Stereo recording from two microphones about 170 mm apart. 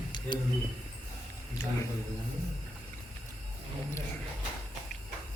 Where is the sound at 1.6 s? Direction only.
15° left (ahead or behind).